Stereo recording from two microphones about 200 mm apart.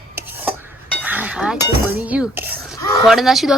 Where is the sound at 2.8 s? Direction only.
15° left (ahead or behind).